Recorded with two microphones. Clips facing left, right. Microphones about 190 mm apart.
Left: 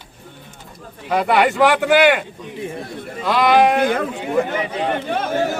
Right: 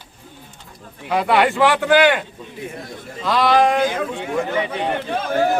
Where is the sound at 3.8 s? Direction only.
60° left (ahead or behind).